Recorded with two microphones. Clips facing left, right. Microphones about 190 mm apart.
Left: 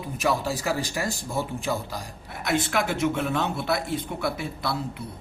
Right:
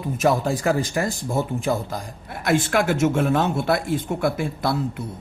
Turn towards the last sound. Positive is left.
turn(degrees=-50)  # may be behind; listen again after turning